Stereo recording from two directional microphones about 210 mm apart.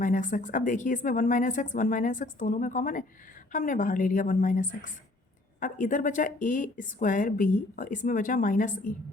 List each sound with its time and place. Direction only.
0.0 s speech: 40° left (ahead or behind)